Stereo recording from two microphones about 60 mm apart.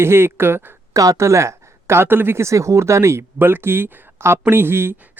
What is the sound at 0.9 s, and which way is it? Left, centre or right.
Speech, right.